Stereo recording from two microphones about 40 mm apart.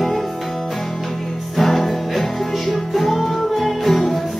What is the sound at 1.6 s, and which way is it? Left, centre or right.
Music, centre.